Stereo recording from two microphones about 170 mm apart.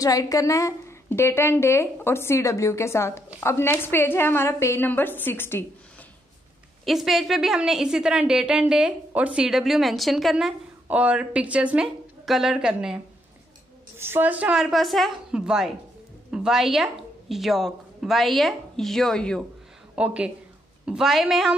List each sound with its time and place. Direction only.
0.0 s a woman's voice: 20° left (ahead or behind)
6.8 s a woman's voice: centre (ahead or behind)
20.0 s a woman's voice: 5° right (ahead or behind)